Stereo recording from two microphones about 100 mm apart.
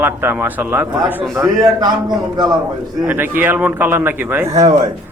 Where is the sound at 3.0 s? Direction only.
20° right (ahead or behind).